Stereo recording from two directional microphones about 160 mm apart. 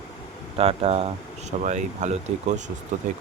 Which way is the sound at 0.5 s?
40° right (ahead or behind).